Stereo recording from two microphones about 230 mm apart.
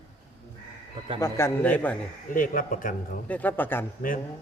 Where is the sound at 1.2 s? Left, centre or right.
Centre.